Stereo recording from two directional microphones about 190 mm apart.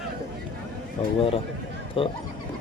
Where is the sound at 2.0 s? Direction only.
30° left (ahead or behind).